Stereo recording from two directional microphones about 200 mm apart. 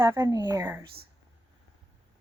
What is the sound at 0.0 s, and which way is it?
Speech, 15° right (ahead or behind).